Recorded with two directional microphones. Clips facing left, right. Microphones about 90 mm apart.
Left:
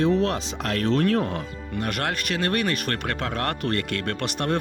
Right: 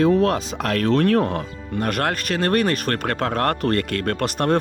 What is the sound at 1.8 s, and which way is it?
Speech, 45° right (ahead or behind).